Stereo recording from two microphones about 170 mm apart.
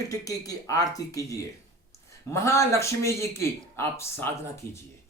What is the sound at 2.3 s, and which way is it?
A man's voice, 15° left (ahead or behind).